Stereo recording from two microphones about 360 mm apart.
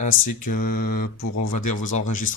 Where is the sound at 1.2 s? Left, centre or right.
Left.